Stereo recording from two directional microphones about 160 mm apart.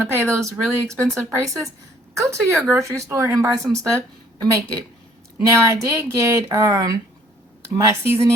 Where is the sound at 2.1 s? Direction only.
20° right (ahead or behind).